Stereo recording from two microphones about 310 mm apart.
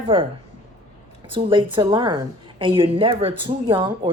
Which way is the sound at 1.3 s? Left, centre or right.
Centre.